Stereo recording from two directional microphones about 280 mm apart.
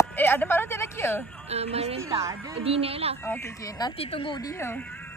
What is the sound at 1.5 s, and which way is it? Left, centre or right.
Speech, right.